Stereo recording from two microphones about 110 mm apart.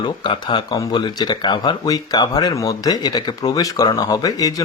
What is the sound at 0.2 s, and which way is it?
Speech, 45° left (ahead or behind).